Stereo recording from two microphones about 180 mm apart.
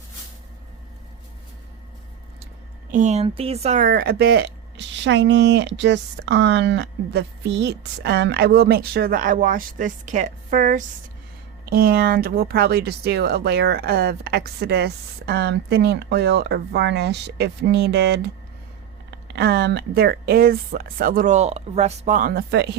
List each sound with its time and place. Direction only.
2.9 s speech: 40° right (ahead or behind)
11.7 s speech: 55° right (ahead or behind)